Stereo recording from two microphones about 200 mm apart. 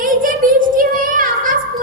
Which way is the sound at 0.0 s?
45° right (ahead or behind).